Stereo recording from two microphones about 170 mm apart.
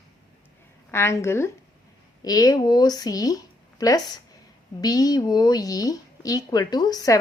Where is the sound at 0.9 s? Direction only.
15° left (ahead or behind).